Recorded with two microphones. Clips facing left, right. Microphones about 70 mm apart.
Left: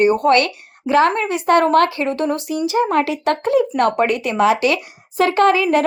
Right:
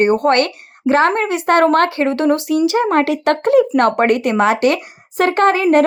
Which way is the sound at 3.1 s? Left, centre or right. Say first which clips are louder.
Right 4 dB; right.